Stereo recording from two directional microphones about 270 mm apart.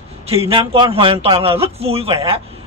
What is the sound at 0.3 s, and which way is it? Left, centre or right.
A man's voice, right.